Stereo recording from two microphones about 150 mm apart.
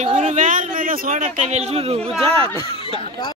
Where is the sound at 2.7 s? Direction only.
40° right (ahead or behind).